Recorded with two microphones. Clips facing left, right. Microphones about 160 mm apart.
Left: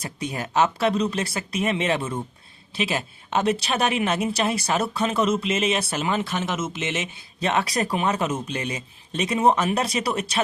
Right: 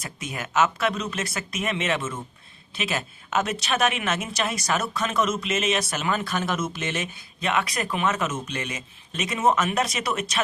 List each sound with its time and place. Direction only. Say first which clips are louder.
0.0 s a woman's voice: left 4 dB; 35° left (ahead or behind)